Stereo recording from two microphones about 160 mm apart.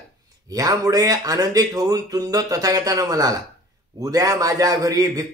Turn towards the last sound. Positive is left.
turn(degrees=-25)  # may be behind; listen again after turning